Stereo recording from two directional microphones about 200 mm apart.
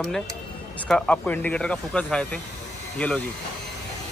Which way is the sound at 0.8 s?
5° left (ahead or behind).